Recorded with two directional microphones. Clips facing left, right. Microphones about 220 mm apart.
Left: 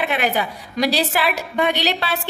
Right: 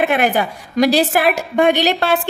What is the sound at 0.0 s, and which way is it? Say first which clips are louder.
A woman's voice: right 5 dB; 50° right (ahead or behind).